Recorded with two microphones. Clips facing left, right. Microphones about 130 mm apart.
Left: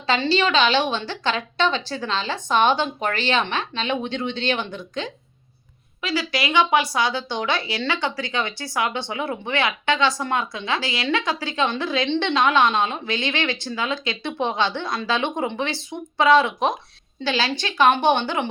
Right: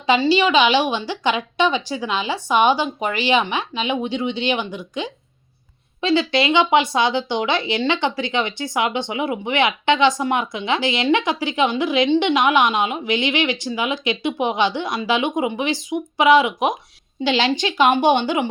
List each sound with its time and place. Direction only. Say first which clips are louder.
0.1 s speech: right 4 dB; 10° right (ahead or behind)
6.0 s speech: right 7 dB; 25° right (ahead or behind)